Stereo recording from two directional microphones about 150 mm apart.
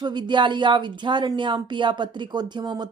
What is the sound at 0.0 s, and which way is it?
Speech, 30° right (ahead or behind).